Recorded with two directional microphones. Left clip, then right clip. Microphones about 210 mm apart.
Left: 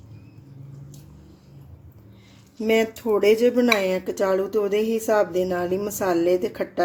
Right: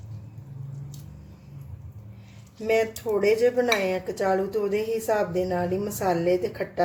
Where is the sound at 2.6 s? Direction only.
45° left (ahead or behind).